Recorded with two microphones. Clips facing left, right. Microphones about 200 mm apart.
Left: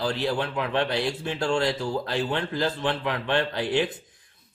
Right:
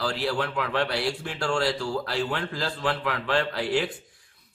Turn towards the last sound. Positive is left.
turn(degrees=20)  # may be behind; listen again after turning